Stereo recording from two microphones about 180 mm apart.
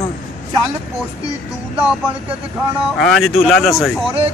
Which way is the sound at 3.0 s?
Centre (ahead or behind).